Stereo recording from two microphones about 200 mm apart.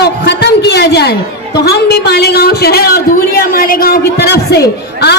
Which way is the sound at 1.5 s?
55° left (ahead or behind).